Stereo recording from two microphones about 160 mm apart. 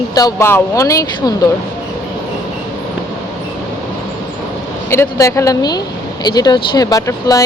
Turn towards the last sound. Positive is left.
turn(degrees=20)  # may be behind; listen again after turning